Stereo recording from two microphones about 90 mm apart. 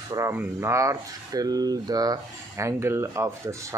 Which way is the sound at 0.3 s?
30° right (ahead or behind).